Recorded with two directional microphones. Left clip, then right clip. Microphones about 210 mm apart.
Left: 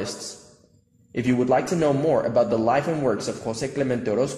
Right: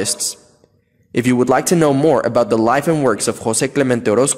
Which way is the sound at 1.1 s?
45° right (ahead or behind).